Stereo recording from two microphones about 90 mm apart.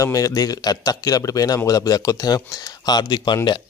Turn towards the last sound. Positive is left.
turn(degrees=55)  # may be behind; listen again after turning